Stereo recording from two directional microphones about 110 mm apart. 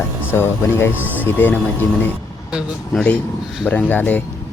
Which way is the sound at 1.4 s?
15° left (ahead or behind).